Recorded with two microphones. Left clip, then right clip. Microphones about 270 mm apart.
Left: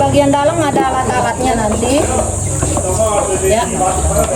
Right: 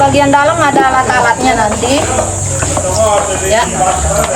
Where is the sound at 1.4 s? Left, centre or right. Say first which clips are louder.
Right 4 dB; right.